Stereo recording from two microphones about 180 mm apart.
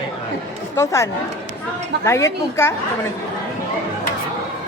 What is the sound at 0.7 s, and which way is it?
A woman's voice, 15° left (ahead or behind).